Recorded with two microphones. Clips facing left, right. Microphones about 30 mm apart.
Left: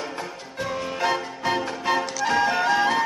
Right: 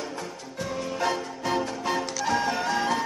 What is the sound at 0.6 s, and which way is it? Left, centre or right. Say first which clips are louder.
Music: left 3 dB; left.